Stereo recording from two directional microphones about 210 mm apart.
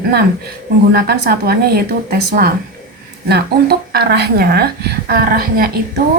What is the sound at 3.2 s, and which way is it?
A woman's voice, 50° right (ahead or behind).